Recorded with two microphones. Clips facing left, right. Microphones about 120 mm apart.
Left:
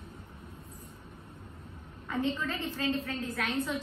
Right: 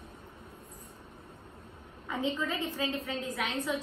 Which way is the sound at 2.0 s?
15° right (ahead or behind).